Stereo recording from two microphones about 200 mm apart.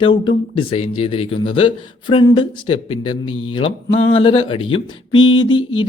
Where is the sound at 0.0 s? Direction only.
25° left (ahead or behind).